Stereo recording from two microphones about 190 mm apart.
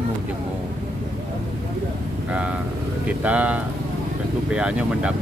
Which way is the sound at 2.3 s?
5° right (ahead or behind).